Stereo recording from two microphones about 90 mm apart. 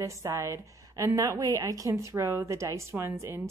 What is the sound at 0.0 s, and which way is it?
A woman's voice, 35° right (ahead or behind).